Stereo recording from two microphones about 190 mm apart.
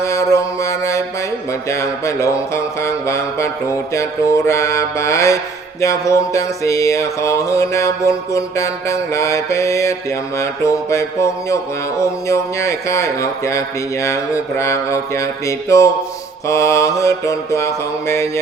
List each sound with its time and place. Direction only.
0.0 s mantra: 15° left (ahead or behind)
1.6 s music: 15° left (ahead or behind)